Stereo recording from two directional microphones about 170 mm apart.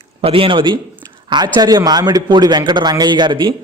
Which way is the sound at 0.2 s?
35° right (ahead or behind).